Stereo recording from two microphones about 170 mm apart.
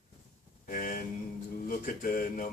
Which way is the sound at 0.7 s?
50° left (ahead or behind).